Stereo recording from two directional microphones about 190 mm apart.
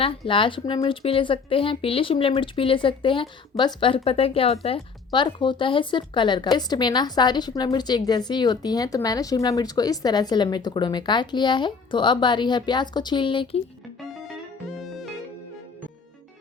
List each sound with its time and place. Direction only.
0.3 s speech: 25° left (ahead or behind)
14.0 s music: centre (ahead or behind)